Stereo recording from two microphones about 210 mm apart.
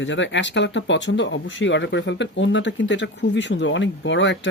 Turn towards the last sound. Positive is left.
turn(degrees=60)  # may be behind; listen again after turning